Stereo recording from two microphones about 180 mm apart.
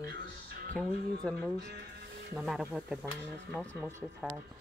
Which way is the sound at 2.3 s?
Centre (ahead or behind).